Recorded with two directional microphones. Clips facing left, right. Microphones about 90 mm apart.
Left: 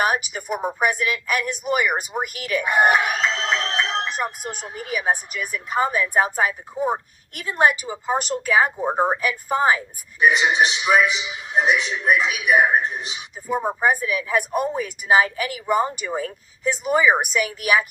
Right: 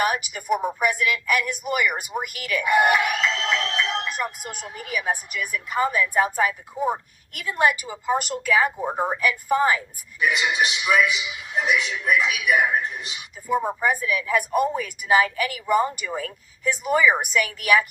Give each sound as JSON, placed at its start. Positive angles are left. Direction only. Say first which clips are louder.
{"t": 0.0, "sound": "speech", "louder": "left 2 dB", "side_deg": 25}
{"t": 8.9, "sound": "speech", "louder": "left 4 dB", "side_deg": 40}
{"t": 9.5, "sound": "speech", "louder": "left 2 dB", "side_deg": 30}
{"t": 13.6, "sound": "speech", "louder": "left 5 dB", "side_deg": 35}